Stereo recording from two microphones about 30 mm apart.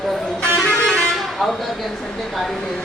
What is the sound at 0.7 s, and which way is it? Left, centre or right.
Music, centre.